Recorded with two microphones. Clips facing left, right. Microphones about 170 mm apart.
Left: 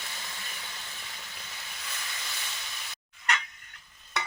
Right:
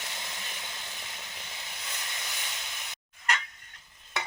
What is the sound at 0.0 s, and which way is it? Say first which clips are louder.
Vehicle: right 2 dB; 20° right (ahead or behind).